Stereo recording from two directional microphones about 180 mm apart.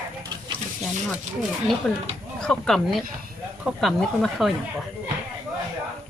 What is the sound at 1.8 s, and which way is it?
Speech, 5° left (ahead or behind).